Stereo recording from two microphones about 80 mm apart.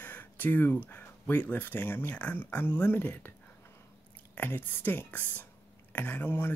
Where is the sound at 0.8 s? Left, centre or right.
Left.